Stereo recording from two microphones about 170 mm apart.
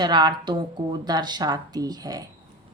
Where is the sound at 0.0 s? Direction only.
25° right (ahead or behind).